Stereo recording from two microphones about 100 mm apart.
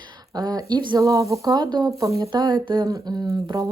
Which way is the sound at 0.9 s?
35° right (ahead or behind).